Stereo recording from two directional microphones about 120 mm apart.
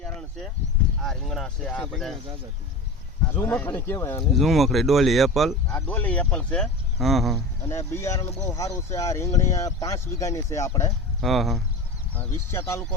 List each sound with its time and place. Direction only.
0.0 s a sound: 5° left (ahead or behind)
1.0 s speech: 5° left (ahead or behind)
3.2 s speech: 15° left (ahead or behind)
4.4 s speech: centre (ahead or behind)
5.7 s speech: 10° left (ahead or behind)
7.7 s speech: 20° left (ahead or behind)
11.2 s speech: centre (ahead or behind)
12.1 s speech: 15° left (ahead or behind)